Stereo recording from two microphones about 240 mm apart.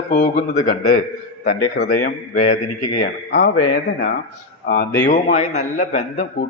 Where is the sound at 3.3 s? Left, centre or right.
Left.